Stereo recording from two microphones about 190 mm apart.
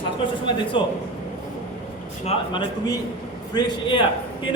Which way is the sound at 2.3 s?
25° left (ahead or behind).